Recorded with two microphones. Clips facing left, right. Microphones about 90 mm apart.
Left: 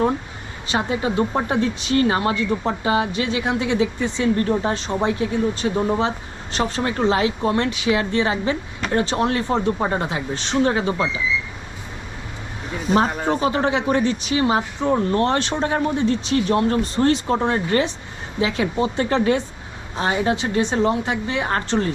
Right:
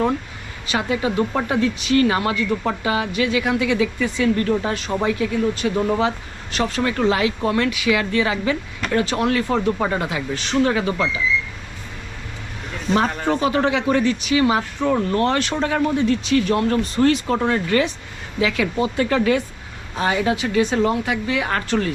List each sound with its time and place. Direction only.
0.7 s speech: 30° left (ahead or behind)
5.7 s speech: 15° left (ahead or behind)
13.1 s speech: 10° left (ahead or behind)
13.4 s speech: 25° left (ahead or behind)